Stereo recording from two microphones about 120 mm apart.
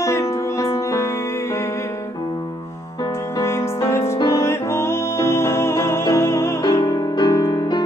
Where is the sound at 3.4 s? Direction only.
20° left (ahead or behind).